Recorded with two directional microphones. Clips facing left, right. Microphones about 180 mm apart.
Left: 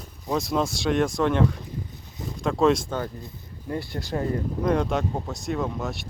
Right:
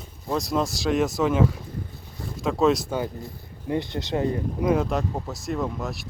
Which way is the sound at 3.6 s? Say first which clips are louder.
Right 4 dB; 20° right (ahead or behind).